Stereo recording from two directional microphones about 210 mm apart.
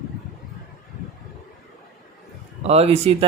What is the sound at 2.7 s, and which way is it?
Speech, 30° right (ahead or behind).